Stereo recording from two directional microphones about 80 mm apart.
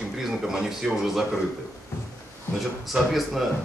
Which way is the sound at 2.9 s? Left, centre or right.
Centre.